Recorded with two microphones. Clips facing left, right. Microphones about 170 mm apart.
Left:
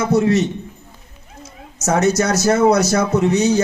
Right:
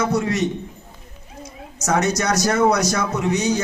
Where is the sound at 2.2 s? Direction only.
25° left (ahead or behind).